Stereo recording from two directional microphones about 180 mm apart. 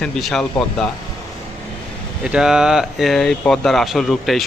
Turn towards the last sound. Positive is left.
turn(degrees=0)  # may be behind; listen again after turning